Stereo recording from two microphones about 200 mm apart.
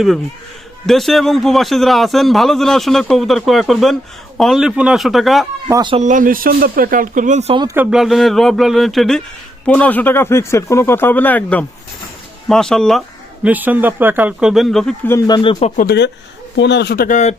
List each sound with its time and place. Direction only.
0.9 s a man's voice: centre (ahead or behind)
5.6 s speech: 20° right (ahead or behind)
6.0 s speech: 40° right (ahead or behind); by 7.8 s 20° right (ahead or behind)
7.8 s a man's voice: 5° right (ahead or behind)
13.4 s a man's voice: 10° right (ahead or behind)
15.3 s speech: 25° left (ahead or behind)
15.7 s speech: 45° left (ahead or behind)